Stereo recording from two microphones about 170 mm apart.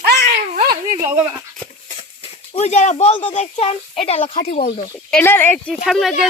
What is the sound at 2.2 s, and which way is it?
Speech, 35° left (ahead or behind).